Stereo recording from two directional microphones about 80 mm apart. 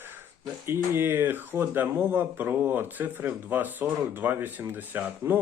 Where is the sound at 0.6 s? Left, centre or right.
Right.